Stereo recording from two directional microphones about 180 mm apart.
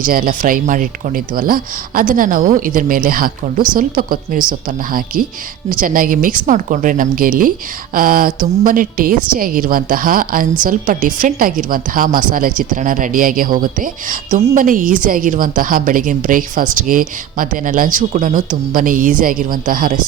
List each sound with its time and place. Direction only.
0.0 s a woman's voice: 50° right (ahead or behind)